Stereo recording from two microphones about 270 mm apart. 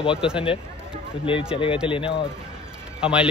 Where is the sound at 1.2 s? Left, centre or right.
Centre.